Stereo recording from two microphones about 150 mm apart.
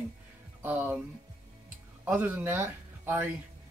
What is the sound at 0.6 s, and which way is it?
Speech, 10° right (ahead or behind).